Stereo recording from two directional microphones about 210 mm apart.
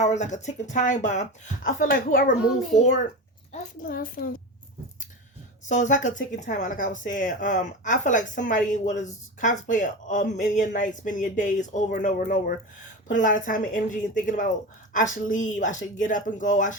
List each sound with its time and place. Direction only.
0.0 s a woman's voice: 35° left (ahead or behind)
3.5 s a woman's voice: 40° left (ahead or behind)
5.6 s a woman's voice: 35° left (ahead or behind)